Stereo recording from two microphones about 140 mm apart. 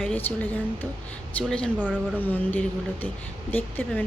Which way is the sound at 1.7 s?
10° right (ahead or behind).